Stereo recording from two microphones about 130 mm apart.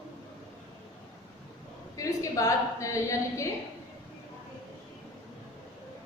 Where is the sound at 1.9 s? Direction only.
25° left (ahead or behind).